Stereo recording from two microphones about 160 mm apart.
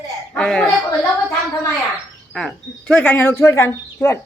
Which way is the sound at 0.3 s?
5° left (ahead or behind).